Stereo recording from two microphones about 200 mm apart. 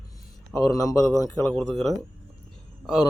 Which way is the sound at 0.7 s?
15° left (ahead or behind).